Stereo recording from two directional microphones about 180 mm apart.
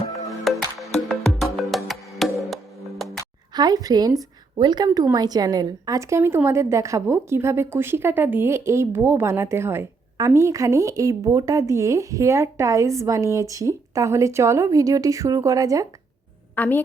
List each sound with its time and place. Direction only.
0.3 s music: centre (ahead or behind)
3.5 s a woman's voice: 20° right (ahead or behind)
16.6 s a woman's voice: 10° left (ahead or behind)